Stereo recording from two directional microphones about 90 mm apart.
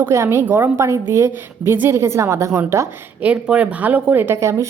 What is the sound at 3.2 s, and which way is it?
Speech, 15° right (ahead or behind).